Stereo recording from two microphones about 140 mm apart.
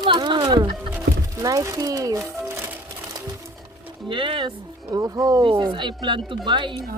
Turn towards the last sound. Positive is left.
turn(degrees=-35)  # may be behind; listen again after turning